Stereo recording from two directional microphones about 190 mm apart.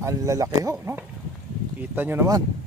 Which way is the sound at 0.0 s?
15° right (ahead or behind).